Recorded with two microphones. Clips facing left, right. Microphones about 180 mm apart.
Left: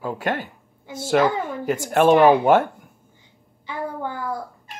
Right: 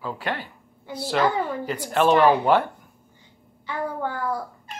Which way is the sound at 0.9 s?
45° left (ahead or behind).